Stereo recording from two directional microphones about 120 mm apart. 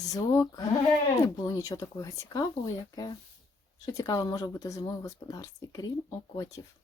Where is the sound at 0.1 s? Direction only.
30° left (ahead or behind).